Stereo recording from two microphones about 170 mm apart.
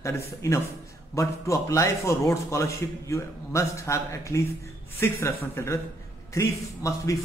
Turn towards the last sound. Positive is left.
turn(degrees=20)  # may be behind; listen again after turning